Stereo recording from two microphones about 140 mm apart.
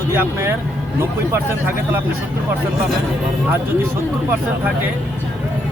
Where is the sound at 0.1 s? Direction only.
15° right (ahead or behind).